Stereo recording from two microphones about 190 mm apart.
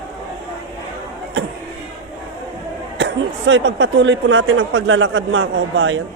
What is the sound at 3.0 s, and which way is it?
Speech, 75° right (ahead or behind).